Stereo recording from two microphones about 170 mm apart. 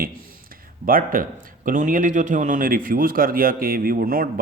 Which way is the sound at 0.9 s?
55° right (ahead or behind).